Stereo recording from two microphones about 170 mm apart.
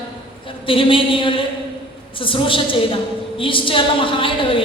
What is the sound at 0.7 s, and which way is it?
Speech, 30° left (ahead or behind).